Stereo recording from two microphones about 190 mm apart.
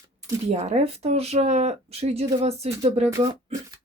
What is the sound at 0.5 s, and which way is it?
Speech, 35° right (ahead or behind).